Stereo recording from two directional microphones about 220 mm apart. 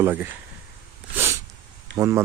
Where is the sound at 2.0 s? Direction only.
10° right (ahead or behind).